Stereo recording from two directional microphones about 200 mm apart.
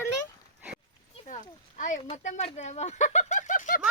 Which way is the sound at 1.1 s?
35° left (ahead or behind).